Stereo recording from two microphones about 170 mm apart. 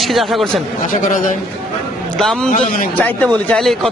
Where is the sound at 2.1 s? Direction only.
Centre (ahead or behind).